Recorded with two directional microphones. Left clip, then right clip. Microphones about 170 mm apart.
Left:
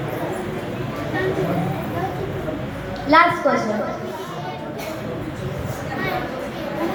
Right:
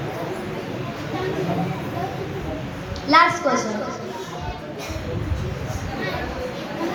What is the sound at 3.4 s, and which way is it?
Speech, 90° right.